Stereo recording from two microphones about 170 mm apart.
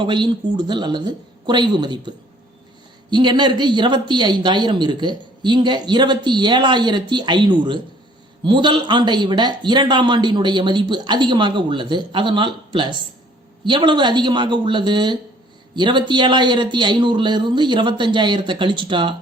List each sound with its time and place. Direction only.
0.0 s speech: 25° right (ahead or behind)